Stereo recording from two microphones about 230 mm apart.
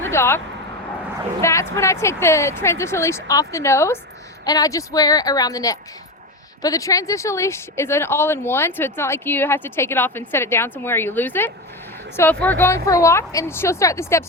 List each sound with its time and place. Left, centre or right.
0.0 s speech: centre